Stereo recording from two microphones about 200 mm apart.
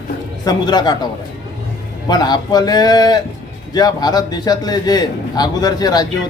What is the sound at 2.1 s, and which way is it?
A man's voice, 20° left (ahead or behind).